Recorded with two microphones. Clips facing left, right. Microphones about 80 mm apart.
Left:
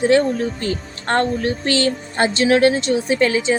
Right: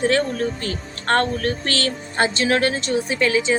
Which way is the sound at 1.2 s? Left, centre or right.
Right.